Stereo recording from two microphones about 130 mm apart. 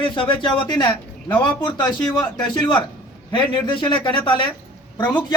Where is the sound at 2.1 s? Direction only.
35° left (ahead or behind).